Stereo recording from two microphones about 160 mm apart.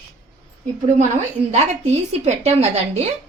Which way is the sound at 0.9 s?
45° right (ahead or behind).